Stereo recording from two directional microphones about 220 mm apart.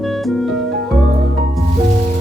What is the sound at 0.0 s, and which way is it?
Music, centre (ahead or behind).